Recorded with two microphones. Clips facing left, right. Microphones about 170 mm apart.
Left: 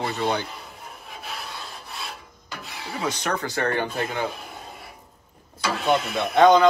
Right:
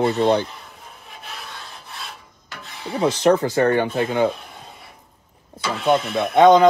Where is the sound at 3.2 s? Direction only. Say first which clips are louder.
Right 11 dB; 25° right (ahead or behind).